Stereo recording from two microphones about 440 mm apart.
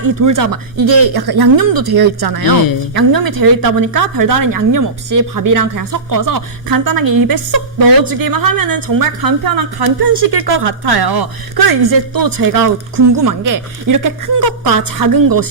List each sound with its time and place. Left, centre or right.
0.0 s a woman's voice: right